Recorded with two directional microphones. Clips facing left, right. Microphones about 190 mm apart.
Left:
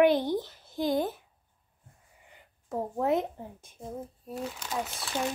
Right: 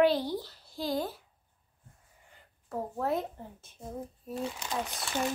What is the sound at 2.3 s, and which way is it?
Speech, 20° left (ahead or behind).